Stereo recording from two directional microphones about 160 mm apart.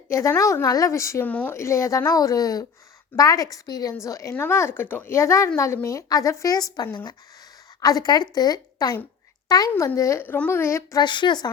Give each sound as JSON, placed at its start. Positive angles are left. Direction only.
{"t": 0.1, "sound": "a woman's voice", "side_deg": 15}
{"t": 11.0, "sound": "a woman's voice", "side_deg": 30}